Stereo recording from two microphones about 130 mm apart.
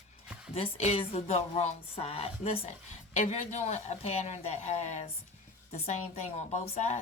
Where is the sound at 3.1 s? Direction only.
60° left (ahead or behind).